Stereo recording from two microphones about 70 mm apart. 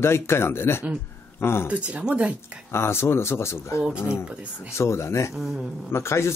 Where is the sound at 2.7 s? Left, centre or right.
Left.